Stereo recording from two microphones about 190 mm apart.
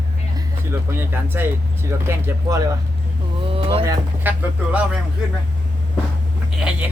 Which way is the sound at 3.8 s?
10° right (ahead or behind).